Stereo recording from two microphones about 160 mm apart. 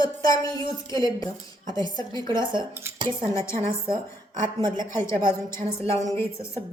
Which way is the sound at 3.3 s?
20° left (ahead or behind).